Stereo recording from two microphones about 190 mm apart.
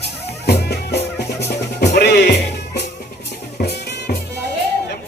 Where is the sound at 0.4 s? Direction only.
60° left (ahead or behind).